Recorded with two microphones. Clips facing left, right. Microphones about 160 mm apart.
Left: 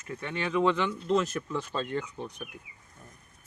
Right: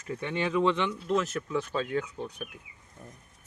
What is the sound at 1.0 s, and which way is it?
Speech, 5° right (ahead or behind).